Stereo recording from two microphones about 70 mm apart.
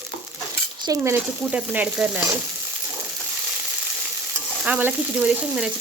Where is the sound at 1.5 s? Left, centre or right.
Right.